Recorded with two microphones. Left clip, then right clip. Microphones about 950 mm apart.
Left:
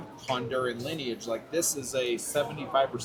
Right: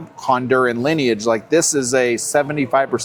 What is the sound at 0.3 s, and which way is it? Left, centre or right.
Speech, right.